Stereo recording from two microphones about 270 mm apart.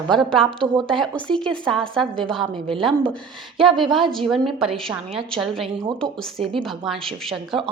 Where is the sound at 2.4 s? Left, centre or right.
Centre.